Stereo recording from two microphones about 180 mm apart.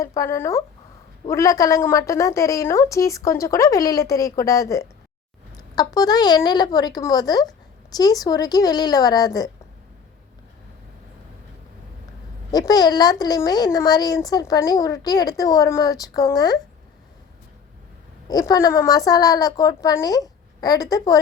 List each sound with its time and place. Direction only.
0.0 s a woman's voice: 20° left (ahead or behind)
12.5 s a woman's voice: 20° left (ahead or behind)
18.3 s a woman's voice: 20° left (ahead or behind)